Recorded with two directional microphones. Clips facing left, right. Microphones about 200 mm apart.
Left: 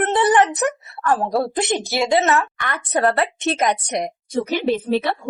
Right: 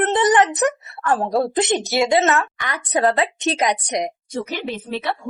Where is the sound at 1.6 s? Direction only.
20° right (ahead or behind).